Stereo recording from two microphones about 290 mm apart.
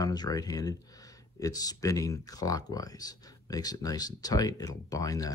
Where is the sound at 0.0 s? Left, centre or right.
Centre.